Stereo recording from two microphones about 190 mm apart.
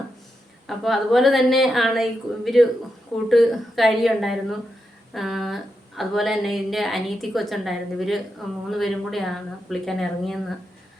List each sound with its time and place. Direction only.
0.7 s speech: centre (ahead or behind)